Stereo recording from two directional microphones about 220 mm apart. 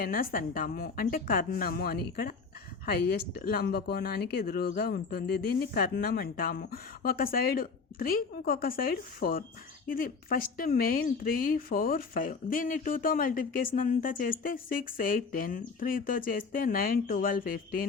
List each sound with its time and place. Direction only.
0.0 s speech: 40° left (ahead or behind)